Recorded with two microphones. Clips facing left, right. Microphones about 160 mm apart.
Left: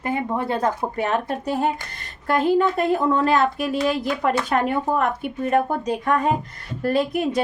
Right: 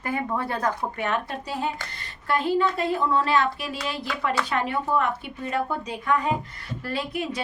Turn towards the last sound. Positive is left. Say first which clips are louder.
# left 8 dB
turn(degrees=45)  # may be behind; listen again after turning